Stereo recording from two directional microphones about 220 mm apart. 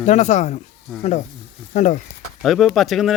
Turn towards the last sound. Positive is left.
turn(degrees=0)  # may be behind; listen again after turning